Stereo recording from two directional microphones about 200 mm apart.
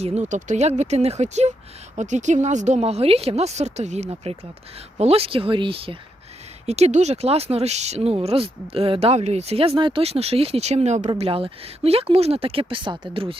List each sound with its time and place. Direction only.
0.0 s speech: 35° right (ahead or behind)